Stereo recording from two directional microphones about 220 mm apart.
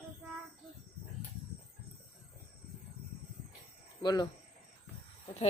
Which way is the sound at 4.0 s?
20° left (ahead or behind).